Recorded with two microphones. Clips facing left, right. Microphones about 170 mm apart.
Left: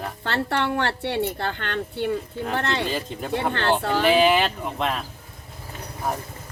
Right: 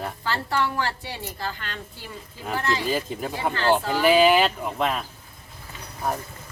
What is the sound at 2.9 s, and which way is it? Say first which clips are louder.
Speech: even; 5° right (ahead or behind).